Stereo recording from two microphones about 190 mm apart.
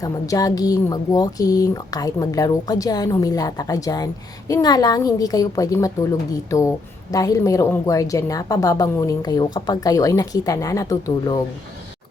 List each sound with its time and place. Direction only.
0.0 s speech: 20° left (ahead or behind)